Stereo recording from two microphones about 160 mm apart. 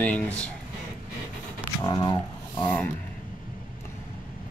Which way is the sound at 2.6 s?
10° left (ahead or behind).